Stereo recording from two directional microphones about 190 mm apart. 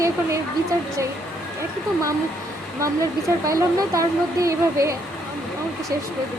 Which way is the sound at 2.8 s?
15° right (ahead or behind).